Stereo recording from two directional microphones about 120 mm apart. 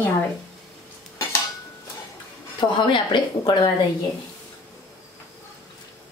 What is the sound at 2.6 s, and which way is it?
Speech, 40° left (ahead or behind).